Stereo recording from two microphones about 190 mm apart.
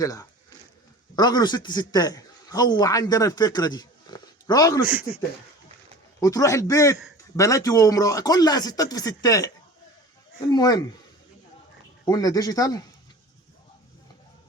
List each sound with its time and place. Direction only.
0.0 s a man's voice: 20° left (ahead or behind)
6.1 s a man's voice: 20° left (ahead or behind)
10.5 s speech: 20° left (ahead or behind)
12.0 s speech: 20° left (ahead or behind)